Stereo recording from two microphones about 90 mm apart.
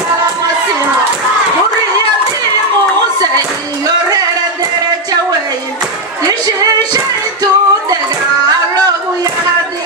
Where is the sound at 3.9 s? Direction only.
45° right (ahead or behind).